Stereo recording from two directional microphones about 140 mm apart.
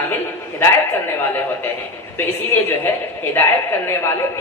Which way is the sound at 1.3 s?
15° left (ahead or behind).